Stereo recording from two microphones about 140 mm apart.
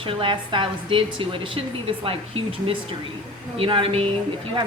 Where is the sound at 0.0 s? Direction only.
40° right (ahead or behind).